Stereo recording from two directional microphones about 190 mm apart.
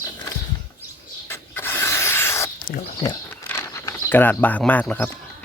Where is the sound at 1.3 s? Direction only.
10° left (ahead or behind).